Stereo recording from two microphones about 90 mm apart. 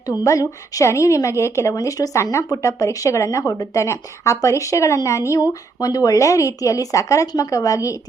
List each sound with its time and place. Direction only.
0.1 s a woman's voice: 40° left (ahead or behind)